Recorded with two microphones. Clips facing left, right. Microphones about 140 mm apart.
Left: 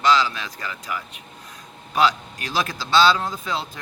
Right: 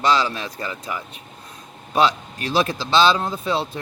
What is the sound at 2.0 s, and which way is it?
Speech, 25° right (ahead or behind).